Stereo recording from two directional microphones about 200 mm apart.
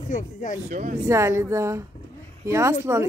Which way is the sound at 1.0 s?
15° right (ahead or behind).